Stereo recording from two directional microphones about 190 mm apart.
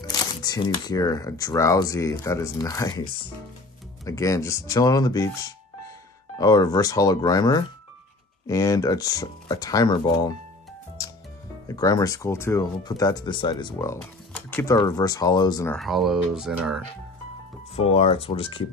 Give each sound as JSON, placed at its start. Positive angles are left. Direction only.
{"t": 0.0, "sound": "speech", "side_deg": 20}
{"t": 11.6, "sound": "speech", "side_deg": 20}
{"t": 15.7, "sound": "speech", "side_deg": 0}
{"t": 17.7, "sound": "speech", "side_deg": 35}